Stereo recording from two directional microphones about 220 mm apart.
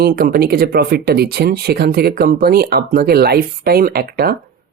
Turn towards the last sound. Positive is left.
turn(degrees=-45)  # may be behind; listen again after turning